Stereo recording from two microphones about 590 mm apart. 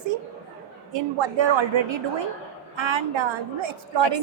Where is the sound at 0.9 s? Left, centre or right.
Right.